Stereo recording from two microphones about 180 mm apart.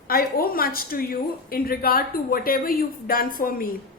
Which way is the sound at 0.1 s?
55° left (ahead or behind).